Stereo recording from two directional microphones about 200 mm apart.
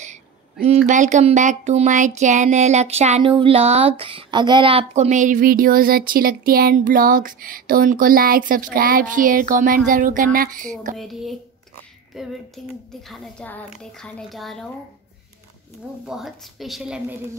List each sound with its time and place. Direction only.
0.7 s a sound: 35° right (ahead or behind)
4.0 s speech: 25° right (ahead or behind)
11.0 s speech: centre (ahead or behind)
16.1 s speech: centre (ahead or behind)